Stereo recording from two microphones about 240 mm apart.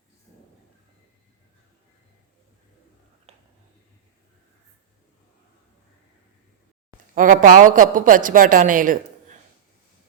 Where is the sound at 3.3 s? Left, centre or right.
Right.